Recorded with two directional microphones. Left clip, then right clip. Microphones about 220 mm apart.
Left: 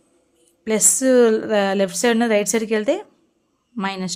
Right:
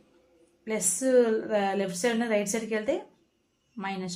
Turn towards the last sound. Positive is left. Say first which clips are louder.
# left 9 dB
turn(degrees=45)  # may be behind; listen again after turning